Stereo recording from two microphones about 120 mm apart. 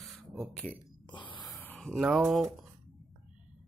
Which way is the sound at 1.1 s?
40° left (ahead or behind).